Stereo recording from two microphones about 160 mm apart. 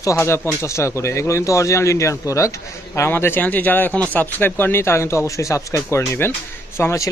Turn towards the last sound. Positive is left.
turn(degrees=20)  # may be behind; listen again after turning